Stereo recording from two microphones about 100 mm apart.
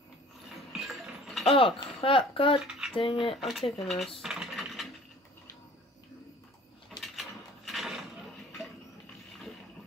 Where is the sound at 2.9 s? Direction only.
60° left (ahead or behind).